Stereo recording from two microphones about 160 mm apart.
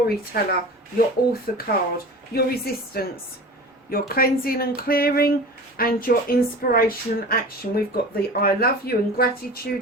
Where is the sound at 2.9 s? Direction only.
75° left (ahead or behind).